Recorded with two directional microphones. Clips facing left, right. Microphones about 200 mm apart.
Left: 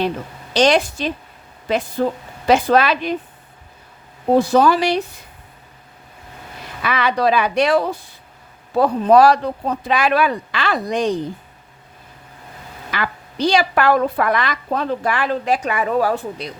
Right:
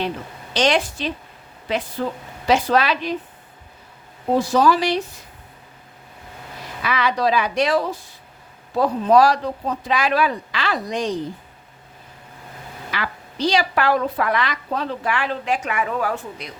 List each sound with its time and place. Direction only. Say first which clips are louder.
0.5 s a woman's voice: left 4 dB; 40° left (ahead or behind)
4.4 s speech: left 3 dB; 55° left (ahead or behind)
6.8 s speech: left 3 dB; 55° left (ahead or behind)
12.9 s a woman's voice: left 4 dB; 50° left (ahead or behind); by 16.5 s 35° left (ahead or behind)